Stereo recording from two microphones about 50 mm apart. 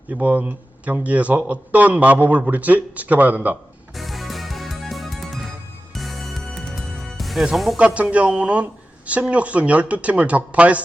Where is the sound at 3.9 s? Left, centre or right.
Centre.